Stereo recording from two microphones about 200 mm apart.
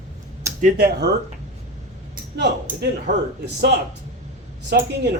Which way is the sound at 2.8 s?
55° right (ahead or behind).